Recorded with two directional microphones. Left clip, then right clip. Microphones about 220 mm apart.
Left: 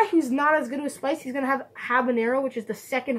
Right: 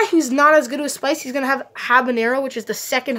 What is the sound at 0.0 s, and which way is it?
Speech, 40° right (ahead or behind).